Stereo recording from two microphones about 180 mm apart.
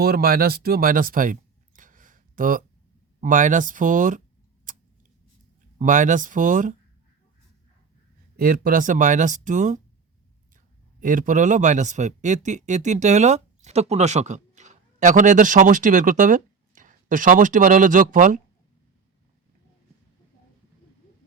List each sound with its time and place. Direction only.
0.0 s speech: 55° right (ahead or behind)
4.7 s scissors: 45° right (ahead or behind)
5.8 s speech: 45° right (ahead or behind)
8.4 s speech: 55° right (ahead or behind)
11.0 s speech: 45° right (ahead or behind)